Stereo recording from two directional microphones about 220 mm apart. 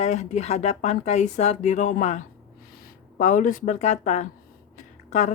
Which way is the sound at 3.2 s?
35° left (ahead or behind).